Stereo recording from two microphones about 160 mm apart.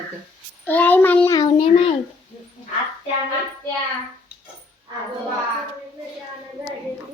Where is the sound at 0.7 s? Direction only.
10° left (ahead or behind).